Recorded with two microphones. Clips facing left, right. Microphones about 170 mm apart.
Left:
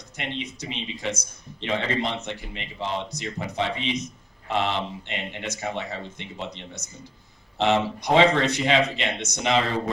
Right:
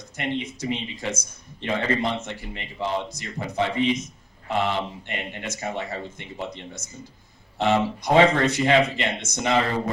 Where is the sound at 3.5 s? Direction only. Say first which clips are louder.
Right 5 dB; 55° right (ahead or behind).